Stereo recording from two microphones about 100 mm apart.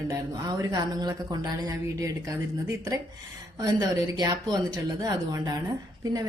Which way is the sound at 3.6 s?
40° right (ahead or behind).